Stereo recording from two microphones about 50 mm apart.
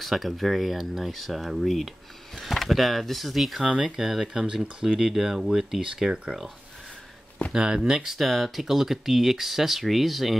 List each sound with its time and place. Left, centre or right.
0.0 s speech: centre
3.6 s speech: centre
3.9 s speech: centre
7.5 s speech: centre